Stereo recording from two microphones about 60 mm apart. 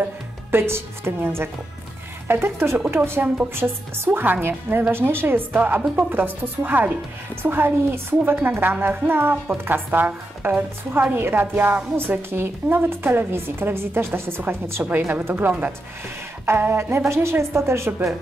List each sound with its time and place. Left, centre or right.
0.0 s a woman's voice: right
5.8 s a woman's voice: right
15.2 s a woman's voice: right
16.4 s a woman's voice: right